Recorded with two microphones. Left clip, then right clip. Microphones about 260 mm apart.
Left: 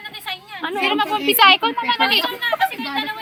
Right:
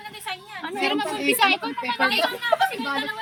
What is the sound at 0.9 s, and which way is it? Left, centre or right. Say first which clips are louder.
A woman's voice: left 4 dB; centre.